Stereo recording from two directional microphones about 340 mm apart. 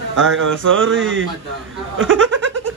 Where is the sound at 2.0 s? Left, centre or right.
Right.